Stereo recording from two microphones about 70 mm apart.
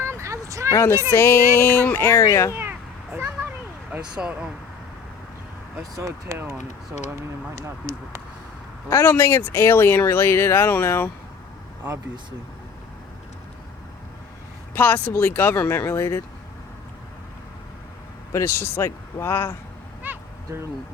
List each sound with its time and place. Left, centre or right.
0.0 s vehicle: right
0.7 s speech: left
2.5 s cat: right
3.2 s a sound: right
4.2 s speech: centre
6.0 s speech: right
6.3 s speech: right
7.5 s speech: right
8.9 s speech: left
14.8 s speech: left
18.3 s speech: left
20.0 s a sound: right